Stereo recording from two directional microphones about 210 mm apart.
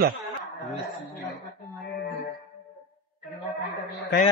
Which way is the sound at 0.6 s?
Centre (ahead or behind).